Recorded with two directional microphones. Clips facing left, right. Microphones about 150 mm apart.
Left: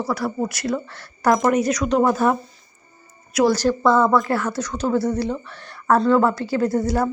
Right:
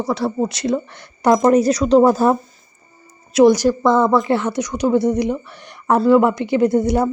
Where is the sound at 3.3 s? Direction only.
15° right (ahead or behind).